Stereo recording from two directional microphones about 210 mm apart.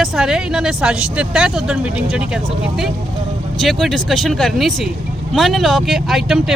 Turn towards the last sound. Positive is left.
turn(degrees=0)  # may be behind; listen again after turning